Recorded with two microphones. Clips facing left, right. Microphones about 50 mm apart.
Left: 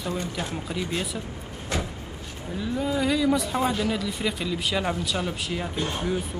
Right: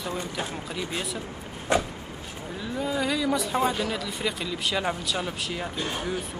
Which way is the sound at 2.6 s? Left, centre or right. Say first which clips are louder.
Left 2 dB; centre.